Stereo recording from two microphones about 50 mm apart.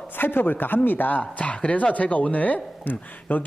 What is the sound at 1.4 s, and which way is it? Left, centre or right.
A woman's voice, left.